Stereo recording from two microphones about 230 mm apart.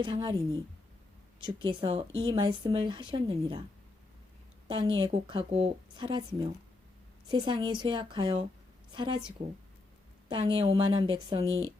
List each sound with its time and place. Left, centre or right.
0.0 s a woman's voice: centre
4.7 s a woman's voice: right